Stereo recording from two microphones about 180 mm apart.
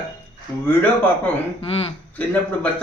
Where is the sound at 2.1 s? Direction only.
10° left (ahead or behind).